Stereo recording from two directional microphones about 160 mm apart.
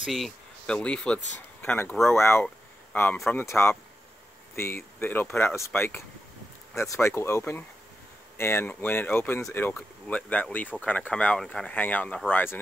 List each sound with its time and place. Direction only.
0.0 s speech: centre (ahead or behind)
2.4 s a sound: 10° left (ahead or behind)
3.3 s speech: 15° left (ahead or behind)